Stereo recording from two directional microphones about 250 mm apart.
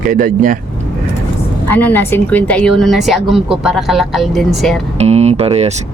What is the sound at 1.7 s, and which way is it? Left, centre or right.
A woman's voice, centre.